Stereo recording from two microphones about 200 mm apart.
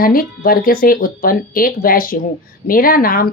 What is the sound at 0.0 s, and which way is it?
Speech, 45° left (ahead or behind).